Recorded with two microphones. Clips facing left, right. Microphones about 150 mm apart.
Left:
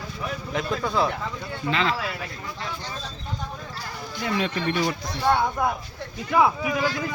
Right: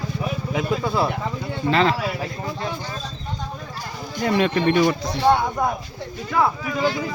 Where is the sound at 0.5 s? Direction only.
10° right (ahead or behind).